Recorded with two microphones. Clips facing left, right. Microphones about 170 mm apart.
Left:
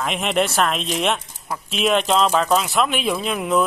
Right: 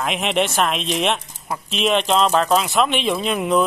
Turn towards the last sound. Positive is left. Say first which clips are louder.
# right 2 dB
turn(degrees=0)  # may be behind; listen again after turning